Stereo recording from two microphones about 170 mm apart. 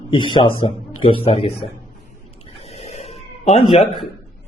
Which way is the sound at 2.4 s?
35° left (ahead or behind).